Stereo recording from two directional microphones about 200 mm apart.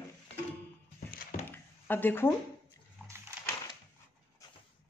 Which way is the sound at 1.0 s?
45° left (ahead or behind).